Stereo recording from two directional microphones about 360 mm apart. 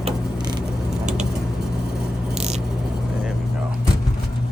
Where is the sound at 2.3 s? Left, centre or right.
Centre.